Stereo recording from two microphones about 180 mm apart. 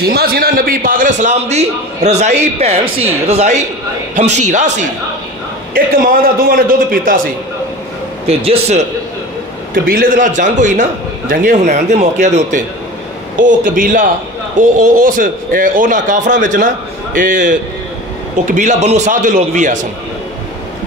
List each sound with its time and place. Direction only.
0.0 s a man's voice: 60° right (ahead or behind); by 4.8 s 40° right (ahead or behind)
5.7 s a man's voice: 50° right (ahead or behind)
8.5 s a man's voice: 35° right (ahead or behind)
9.8 s a man's voice: 50° right (ahead or behind)